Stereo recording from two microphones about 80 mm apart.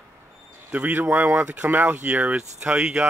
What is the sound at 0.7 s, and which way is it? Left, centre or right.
Speech, right.